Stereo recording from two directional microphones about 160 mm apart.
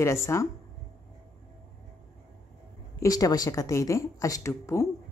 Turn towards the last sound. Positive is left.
turn(degrees=15)  # may be behind; listen again after turning